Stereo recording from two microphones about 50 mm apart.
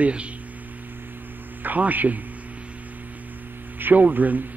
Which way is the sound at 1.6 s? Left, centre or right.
Right.